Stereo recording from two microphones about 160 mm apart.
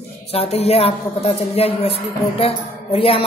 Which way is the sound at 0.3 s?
40° left (ahead or behind).